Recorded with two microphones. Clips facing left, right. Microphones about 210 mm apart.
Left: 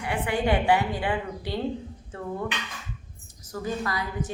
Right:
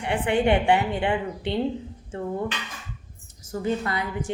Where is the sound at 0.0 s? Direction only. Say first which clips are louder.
Right 4 dB; 25° right (ahead or behind).